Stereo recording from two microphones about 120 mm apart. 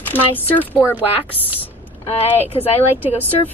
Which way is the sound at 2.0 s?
55° left (ahead or behind).